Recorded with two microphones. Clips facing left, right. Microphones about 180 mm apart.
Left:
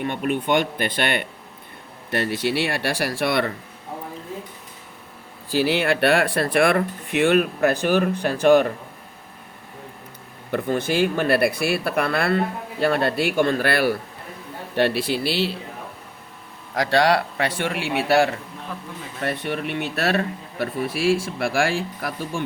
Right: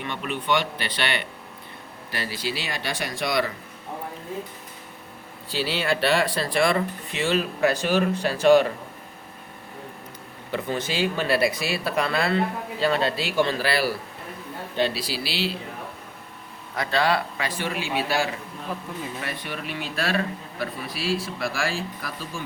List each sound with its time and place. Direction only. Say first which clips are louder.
0.0 s speech: left 7 dB; 50° left (ahead or behind)
5.5 s speech: left 5 dB; 55° left (ahead or behind)
10.5 s speech: left 5 dB; 55° left (ahead or behind)
16.7 s speech: left 5 dB; 80° left
17.3 s speech: left 4 dB; 65° left (ahead or behind)